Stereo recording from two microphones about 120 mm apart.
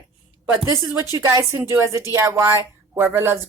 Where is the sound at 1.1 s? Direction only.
25° right (ahead or behind).